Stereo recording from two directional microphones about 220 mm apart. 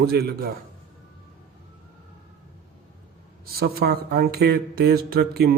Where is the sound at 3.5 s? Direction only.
45° right (ahead or behind).